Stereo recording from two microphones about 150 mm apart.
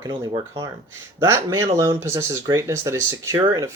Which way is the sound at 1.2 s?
20° right (ahead or behind).